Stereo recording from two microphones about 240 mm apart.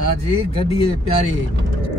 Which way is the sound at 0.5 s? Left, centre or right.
Left.